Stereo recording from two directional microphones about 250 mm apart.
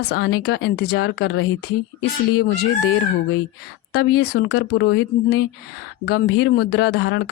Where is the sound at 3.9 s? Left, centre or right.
Left.